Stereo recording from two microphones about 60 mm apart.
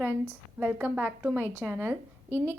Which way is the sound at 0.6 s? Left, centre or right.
Right.